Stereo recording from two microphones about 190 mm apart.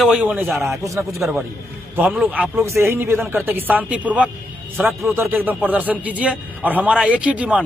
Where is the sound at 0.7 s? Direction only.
15° right (ahead or behind).